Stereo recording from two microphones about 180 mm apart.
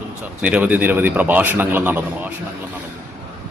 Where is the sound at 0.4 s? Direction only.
10° right (ahead or behind).